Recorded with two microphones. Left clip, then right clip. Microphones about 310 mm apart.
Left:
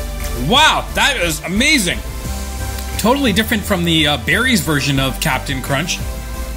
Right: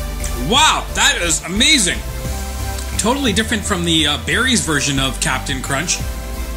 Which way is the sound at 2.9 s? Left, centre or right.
Left.